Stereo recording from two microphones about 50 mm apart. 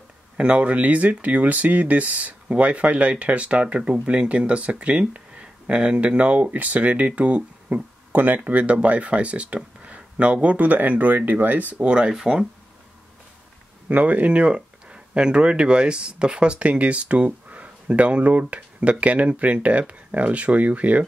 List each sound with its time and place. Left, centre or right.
0.4 s speech: right
8.1 s speech: right
12.1 s speech: centre
13.8 s speech: right